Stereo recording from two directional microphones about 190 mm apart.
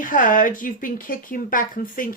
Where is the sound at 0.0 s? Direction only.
45° left (ahead or behind).